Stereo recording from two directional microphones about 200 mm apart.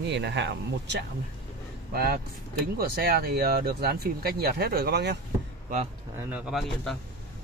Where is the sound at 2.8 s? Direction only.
50° right (ahead or behind).